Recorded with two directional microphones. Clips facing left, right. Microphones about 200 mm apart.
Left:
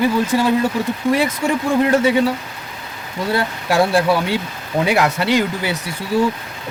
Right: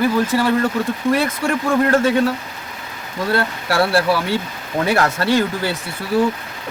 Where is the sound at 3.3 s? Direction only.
15° left (ahead or behind).